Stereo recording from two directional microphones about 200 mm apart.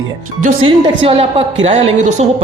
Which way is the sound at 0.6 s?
25° right (ahead or behind).